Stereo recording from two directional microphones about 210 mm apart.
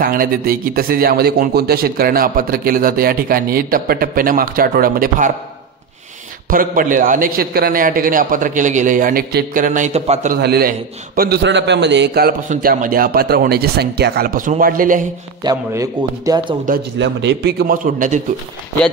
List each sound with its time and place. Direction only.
0.0 s a man's voice: 45° right (ahead or behind)
6.5 s a man's voice: 40° right (ahead or behind)
10.4 s a man's voice: 50° right (ahead or behind)
15.4 s a man's voice: 15° right (ahead or behind)
17.0 s a man's voice: 55° right (ahead or behind); by 18.2 s 40° right (ahead or behind)